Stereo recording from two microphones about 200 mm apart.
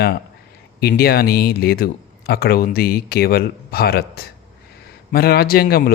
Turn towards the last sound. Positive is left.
turn(degrees=50)  # may be behind; listen again after turning